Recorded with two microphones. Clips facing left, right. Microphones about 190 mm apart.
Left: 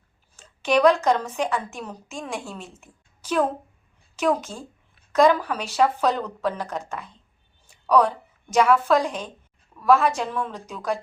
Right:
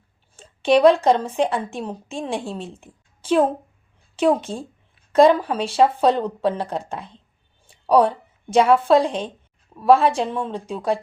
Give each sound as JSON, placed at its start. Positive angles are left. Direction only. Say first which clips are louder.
{"t": 0.3, "sound": "a woman's voice", "louder": "right 4 dB", "side_deg": -30}